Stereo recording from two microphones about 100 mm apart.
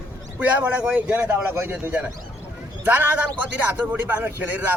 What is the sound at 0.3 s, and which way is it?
A man's voice, 10° right (ahead or behind).